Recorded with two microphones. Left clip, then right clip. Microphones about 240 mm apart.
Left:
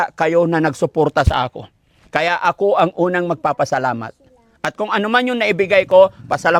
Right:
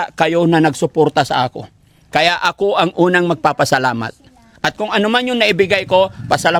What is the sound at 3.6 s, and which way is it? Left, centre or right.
Speech, centre.